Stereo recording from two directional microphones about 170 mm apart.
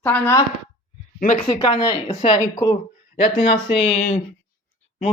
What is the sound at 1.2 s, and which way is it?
Speech, 50° left (ahead or behind).